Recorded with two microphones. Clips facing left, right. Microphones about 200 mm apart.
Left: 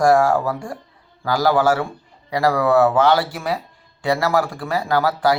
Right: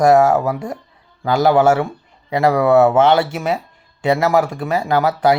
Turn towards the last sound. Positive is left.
turn(degrees=-20)  # may be behind; listen again after turning